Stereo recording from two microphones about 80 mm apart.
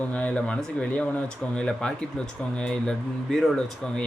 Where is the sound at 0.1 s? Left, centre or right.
Centre.